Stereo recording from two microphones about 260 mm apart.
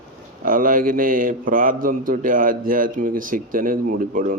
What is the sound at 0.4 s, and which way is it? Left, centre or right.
A man's voice, right.